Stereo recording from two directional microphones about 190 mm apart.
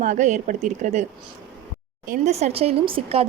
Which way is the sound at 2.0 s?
35° right (ahead or behind).